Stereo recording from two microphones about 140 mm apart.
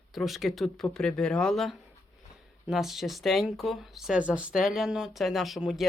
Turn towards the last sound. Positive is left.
turn(degrees=0)  # may be behind; listen again after turning